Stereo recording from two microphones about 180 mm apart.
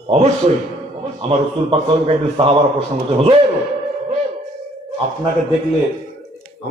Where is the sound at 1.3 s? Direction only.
30° right (ahead or behind).